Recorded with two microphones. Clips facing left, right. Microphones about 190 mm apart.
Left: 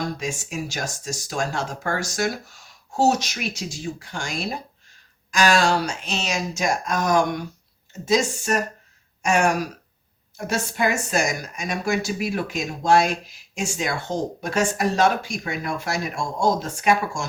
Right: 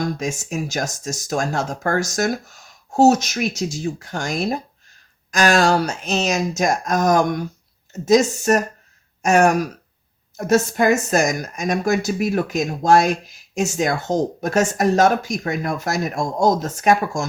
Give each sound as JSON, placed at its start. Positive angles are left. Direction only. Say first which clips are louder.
{"t": 0.2, "sound": "a woman's voice", "louder": "right 4 dB", "side_deg": -45}